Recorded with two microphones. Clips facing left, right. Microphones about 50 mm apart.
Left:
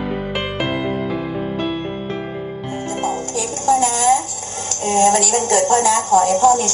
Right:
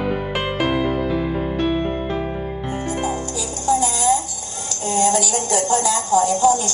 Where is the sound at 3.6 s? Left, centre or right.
Left.